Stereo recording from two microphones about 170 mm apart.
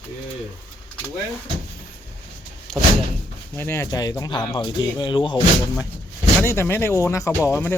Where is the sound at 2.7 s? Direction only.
Centre (ahead or behind).